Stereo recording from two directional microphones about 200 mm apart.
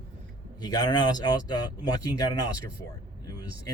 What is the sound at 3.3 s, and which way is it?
Vehicle, 20° left (ahead or behind).